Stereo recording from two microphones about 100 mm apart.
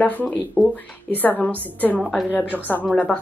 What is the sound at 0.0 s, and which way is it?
Speech, 15° left (ahead or behind).